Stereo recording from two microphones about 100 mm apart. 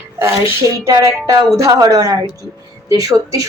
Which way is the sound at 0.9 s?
35° right (ahead or behind).